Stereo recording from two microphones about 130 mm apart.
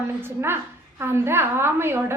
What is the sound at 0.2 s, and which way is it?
A woman's voice, 15° right (ahead or behind).